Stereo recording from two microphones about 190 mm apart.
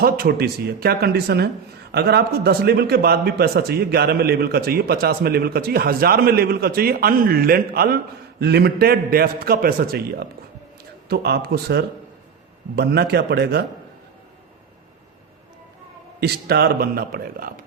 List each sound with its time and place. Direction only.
0.0 s a man's voice: 50° right (ahead or behind)
16.2 s a man's voice: 55° right (ahead or behind)